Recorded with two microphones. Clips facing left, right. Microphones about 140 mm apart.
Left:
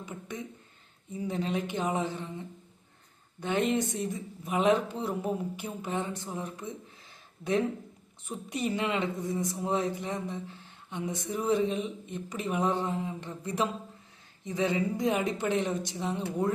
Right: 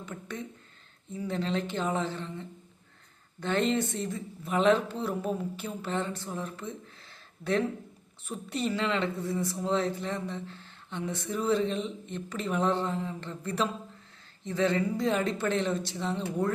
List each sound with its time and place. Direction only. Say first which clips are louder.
0.0 s speech: even; 15° left (ahead or behind)